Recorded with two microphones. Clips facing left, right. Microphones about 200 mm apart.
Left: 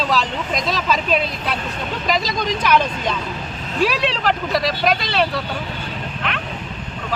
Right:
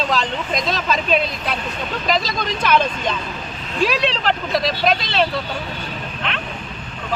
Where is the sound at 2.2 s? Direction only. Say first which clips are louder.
Left 1 dB; 15° left (ahead or behind).